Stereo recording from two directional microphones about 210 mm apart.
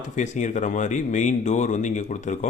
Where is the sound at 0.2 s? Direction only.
35° left (ahead or behind).